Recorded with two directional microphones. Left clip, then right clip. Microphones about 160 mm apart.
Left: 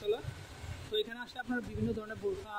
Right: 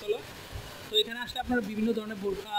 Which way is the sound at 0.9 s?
15° left (ahead or behind).